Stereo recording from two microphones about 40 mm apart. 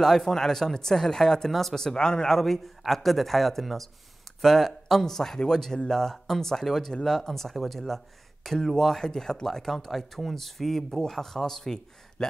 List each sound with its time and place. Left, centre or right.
0.0 s speech: centre
2.0 s a man's voice: centre
2.3 s speech: centre